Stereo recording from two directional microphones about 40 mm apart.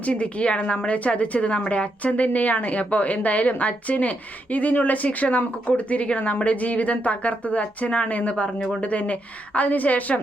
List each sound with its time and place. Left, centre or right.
0.0 s a woman's voice: left